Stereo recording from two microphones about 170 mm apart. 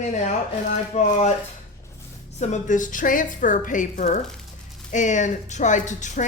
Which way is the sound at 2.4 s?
45° left (ahead or behind).